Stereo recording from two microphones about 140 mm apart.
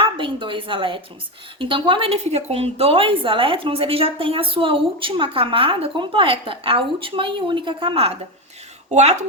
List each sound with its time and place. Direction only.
0.0 s a woman's voice: 35° right (ahead or behind)
8.9 s speech: 55° right (ahead or behind)